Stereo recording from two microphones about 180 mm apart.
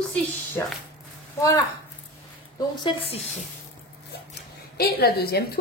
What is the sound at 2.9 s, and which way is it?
Speech, 25° left (ahead or behind).